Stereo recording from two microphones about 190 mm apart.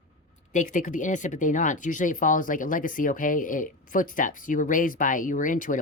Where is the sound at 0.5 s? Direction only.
40° left (ahead or behind).